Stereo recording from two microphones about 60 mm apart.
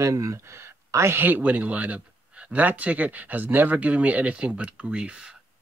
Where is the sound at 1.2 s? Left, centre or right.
Right.